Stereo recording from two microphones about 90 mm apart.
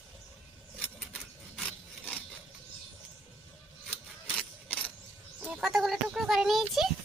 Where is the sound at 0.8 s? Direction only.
15° left (ahead or behind).